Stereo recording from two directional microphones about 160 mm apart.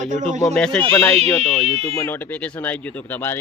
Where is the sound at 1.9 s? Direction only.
15° left (ahead or behind).